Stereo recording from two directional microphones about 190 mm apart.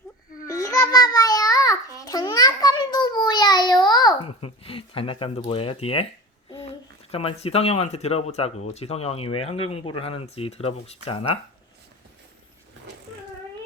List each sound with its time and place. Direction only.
0.4 s babbling: 15° left (ahead or behind)
7.1 s speech: 30° left (ahead or behind)